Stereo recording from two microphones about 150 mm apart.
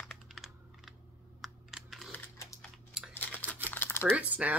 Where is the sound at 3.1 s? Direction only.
10° left (ahead or behind).